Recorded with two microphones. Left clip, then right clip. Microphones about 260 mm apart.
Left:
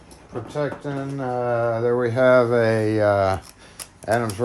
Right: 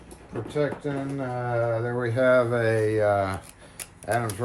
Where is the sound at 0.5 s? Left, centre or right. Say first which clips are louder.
Left 1 dB; left.